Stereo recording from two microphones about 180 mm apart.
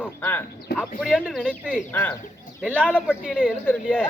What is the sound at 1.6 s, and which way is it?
Speech, 10° right (ahead or behind).